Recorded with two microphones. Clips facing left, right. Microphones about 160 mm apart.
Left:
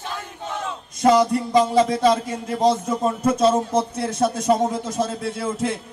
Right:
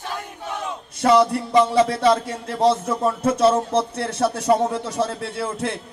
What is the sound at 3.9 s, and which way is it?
Speech, 65° right (ahead or behind).